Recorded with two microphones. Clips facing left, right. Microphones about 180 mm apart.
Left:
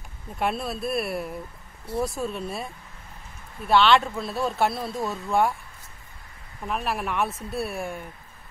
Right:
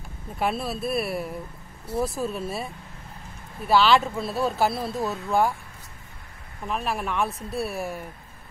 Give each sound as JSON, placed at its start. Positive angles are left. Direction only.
{"t": 0.4, "sound": "speech", "side_deg": 0}
{"t": 6.7, "sound": "speech", "side_deg": 0}